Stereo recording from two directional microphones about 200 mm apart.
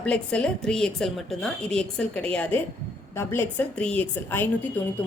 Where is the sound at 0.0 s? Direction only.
5° left (ahead or behind).